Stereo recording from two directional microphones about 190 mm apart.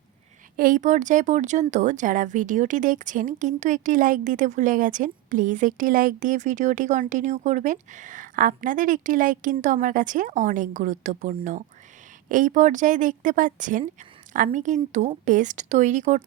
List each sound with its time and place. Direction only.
0.5 s speech: 45° right (ahead or behind)